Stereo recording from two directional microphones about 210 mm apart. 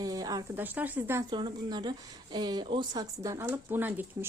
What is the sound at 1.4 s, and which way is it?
Speech, 20° right (ahead or behind).